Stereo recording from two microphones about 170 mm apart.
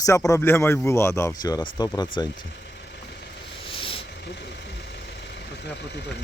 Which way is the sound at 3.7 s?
30° left (ahead or behind).